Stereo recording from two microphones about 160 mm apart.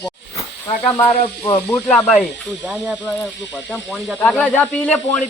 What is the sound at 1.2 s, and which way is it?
Speech, 30° left (ahead or behind).